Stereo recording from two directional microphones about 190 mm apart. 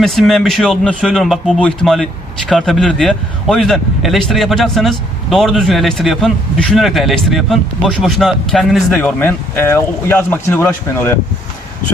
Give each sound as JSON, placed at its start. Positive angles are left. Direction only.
{"t": 0.0, "sound": "a man's voice", "side_deg": 0}